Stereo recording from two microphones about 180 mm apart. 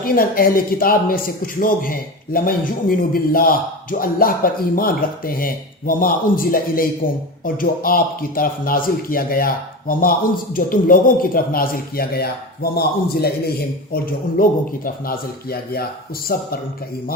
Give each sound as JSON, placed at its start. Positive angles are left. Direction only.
{"t": 0.0, "sound": "a man's voice", "side_deg": 55}
{"t": 14.4, "sound": "a man's voice", "side_deg": 55}